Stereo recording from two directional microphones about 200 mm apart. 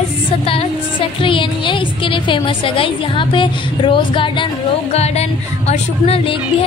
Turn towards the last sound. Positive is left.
turn(degrees=30)  # may be behind; listen again after turning